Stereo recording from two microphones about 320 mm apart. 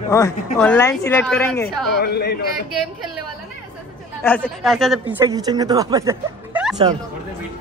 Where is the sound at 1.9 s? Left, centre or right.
Left.